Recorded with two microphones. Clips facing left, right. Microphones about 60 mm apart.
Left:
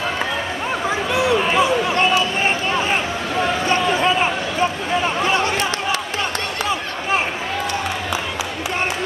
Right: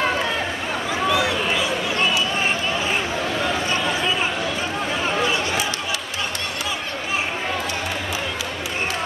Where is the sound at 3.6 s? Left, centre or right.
Left.